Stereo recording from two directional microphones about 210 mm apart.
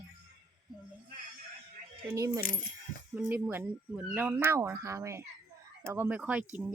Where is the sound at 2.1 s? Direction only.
15° right (ahead or behind).